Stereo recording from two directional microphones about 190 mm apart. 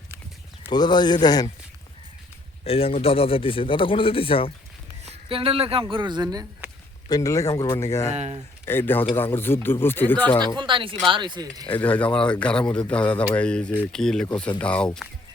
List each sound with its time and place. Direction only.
0.7 s speech: 20° left (ahead or behind)
2.6 s speech: 30° left (ahead or behind)
5.0 s speech: 30° right (ahead or behind)
7.1 s speech: 15° left (ahead or behind)
8.1 s speech: 35° right (ahead or behind)
8.6 s speech: 10° left (ahead or behind)
10.4 s speech: 25° right (ahead or behind)
11.7 s speech: 10° left (ahead or behind)